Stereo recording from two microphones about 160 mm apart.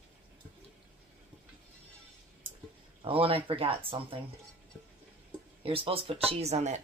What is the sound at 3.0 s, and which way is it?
Speech, 35° right (ahead or behind).